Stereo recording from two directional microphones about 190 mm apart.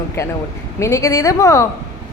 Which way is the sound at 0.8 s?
15° left (ahead or behind).